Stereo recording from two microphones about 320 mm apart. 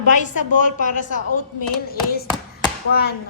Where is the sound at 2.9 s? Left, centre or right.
Left.